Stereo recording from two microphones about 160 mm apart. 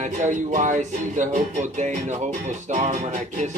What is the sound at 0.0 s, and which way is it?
Music, 50° right (ahead or behind).